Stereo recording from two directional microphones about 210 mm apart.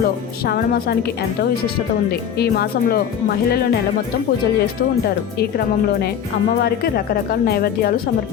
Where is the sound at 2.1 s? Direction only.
50° left (ahead or behind).